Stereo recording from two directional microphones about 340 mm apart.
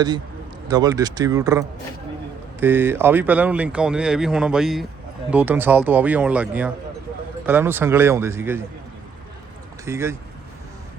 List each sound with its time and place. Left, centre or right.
0.7 s speech: centre
9.8 s speech: centre